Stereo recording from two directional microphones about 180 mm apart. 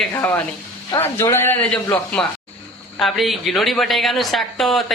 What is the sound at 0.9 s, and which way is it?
A man's voice, 15° left (ahead or behind).